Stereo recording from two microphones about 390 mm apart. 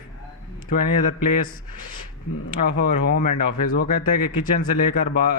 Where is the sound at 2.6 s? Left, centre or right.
Centre.